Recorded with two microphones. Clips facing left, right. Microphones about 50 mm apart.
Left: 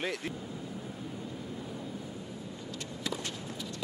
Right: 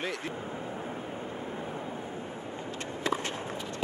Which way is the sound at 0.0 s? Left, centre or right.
Centre.